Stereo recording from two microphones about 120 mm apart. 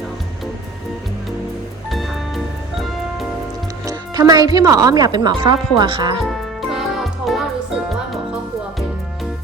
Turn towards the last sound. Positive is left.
turn(degrees=0)  # may be behind; listen again after turning